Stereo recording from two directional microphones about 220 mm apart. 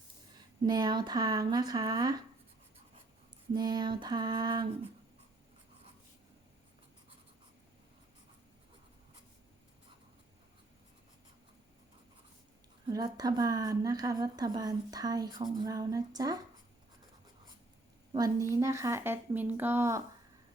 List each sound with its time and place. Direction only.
0.6 s a woman's voice: 20° right (ahead or behind)
3.5 s a sound: 20° right (ahead or behind)
12.9 s a woman's voice: 15° right (ahead or behind)
18.1 s a woman's voice: 15° right (ahead or behind)